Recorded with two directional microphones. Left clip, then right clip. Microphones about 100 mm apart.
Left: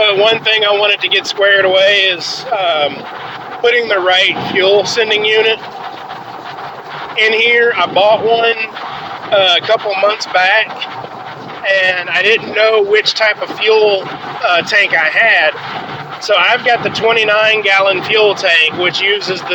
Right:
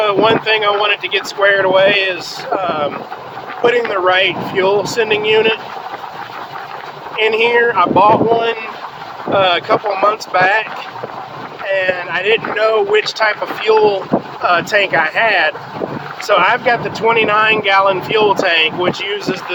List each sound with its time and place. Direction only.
0.0 s speech: 40° right (ahead or behind)
1.4 s speech: 20° right (ahead or behind)
3.9 s speech: 20° right (ahead or behind)
7.2 s speech: 35° right (ahead or behind)
7.6 s speech: 20° right (ahead or behind)
7.9 s speech: 35° right (ahead or behind)
11.8 s speech: 25° right (ahead or behind)
17.2 s speech: 25° right (ahead or behind)